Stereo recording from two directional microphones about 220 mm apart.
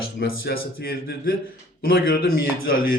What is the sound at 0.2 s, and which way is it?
A man's voice, 45° left (ahead or behind).